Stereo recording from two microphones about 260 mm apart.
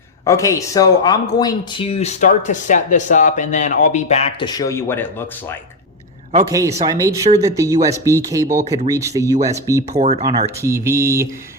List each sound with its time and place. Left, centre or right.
0.3 s speech: centre
6.5 s speech: centre
9.9 s speech: right
10.6 s speech: centre